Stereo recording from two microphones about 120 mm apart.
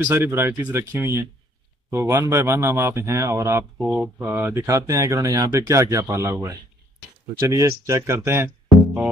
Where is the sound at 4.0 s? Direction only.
15° right (ahead or behind).